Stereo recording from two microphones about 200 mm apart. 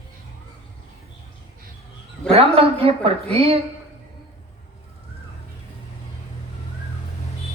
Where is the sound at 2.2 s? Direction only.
30° right (ahead or behind).